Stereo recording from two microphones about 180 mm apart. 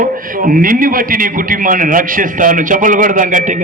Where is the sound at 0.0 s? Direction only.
50° right (ahead or behind).